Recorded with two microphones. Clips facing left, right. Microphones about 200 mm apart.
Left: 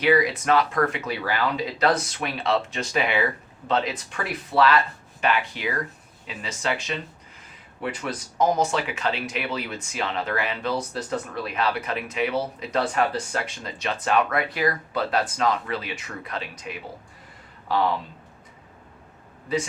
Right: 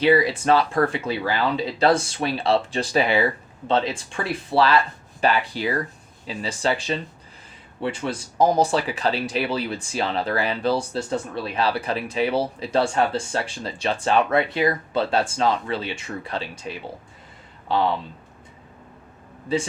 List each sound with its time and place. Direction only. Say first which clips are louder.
0.0 s speech: right 2 dB; 30° right (ahead or behind)
19.5 s speech: right 2 dB; 30° right (ahead or behind)